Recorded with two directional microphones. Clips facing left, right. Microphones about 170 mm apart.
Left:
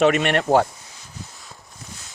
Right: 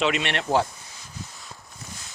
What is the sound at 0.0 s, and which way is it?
Speech, 50° left (ahead or behind).